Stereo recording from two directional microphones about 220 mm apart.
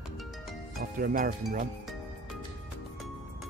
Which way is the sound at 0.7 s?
40° right (ahead or behind).